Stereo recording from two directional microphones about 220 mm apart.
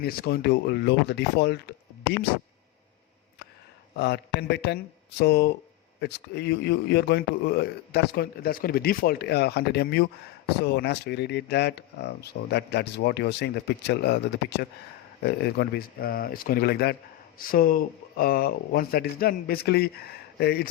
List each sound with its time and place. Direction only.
0.0 s speech: 45° left (ahead or behind)
3.9 s speech: 50° left (ahead or behind)